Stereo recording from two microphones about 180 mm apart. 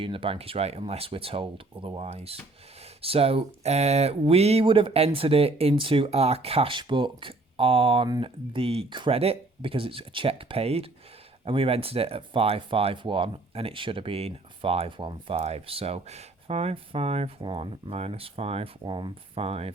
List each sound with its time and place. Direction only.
0.0 s speech: 30° right (ahead or behind)